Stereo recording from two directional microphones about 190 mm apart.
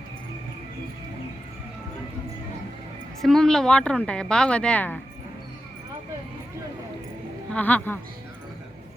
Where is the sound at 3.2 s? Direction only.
Centre (ahead or behind).